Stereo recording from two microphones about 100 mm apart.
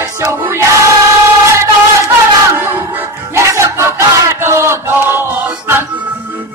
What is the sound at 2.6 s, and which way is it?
Music, 20° right (ahead or behind).